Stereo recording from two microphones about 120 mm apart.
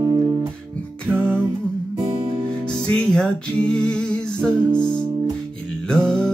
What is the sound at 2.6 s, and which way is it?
Music, 5° left (ahead or behind).